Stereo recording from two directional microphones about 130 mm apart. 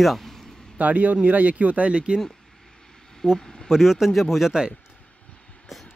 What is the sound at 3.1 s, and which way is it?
A man's voice, 5° left (ahead or behind).